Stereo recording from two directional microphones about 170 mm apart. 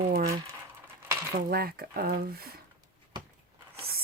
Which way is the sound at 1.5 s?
60° right (ahead or behind).